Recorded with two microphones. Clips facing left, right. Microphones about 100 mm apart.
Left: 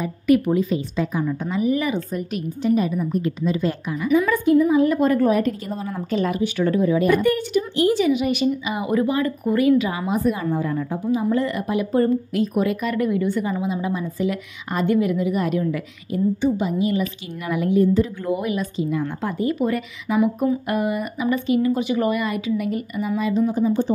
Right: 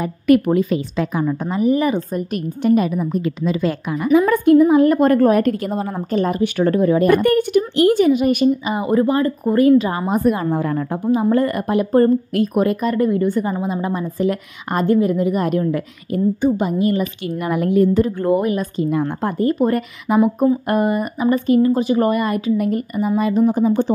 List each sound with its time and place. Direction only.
0.0 s a woman's voice: 60° right (ahead or behind)
1.2 s a woman's voice: 45° right (ahead or behind)
2.6 s a woman's voice: 65° right (ahead or behind); by 4.0 s 90° right
4.3 s a woman's voice: 55° right (ahead or behind)
5.9 s a woman's voice: 40° right (ahead or behind)
6.4 s a woman's voice: 55° right (ahead or behind)
12.8 s a woman's voice: 35° right (ahead or behind); by 23.9 s 60° right (ahead or behind)